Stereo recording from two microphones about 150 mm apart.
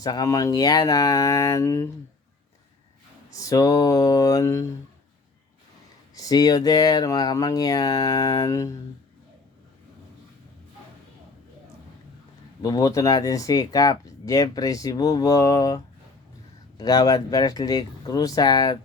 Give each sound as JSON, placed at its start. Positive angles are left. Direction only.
{"t": 0.0, "sound": "speech", "side_deg": 25}
{"t": 3.3, "sound": "speech", "side_deg": 20}
{"t": 6.1, "sound": "speech", "side_deg": 25}
{"t": 12.6, "sound": "speech", "side_deg": 25}